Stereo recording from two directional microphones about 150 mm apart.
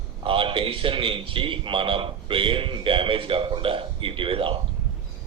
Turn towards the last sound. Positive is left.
turn(degrees=-35)  # may be behind; listen again after turning